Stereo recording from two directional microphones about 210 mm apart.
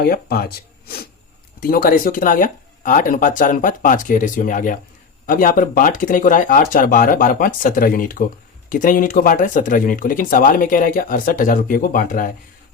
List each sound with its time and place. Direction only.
0.0 s speech: 45° left (ahead or behind)